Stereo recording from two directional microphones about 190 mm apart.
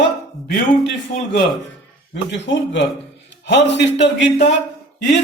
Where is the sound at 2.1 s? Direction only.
70° left (ahead or behind).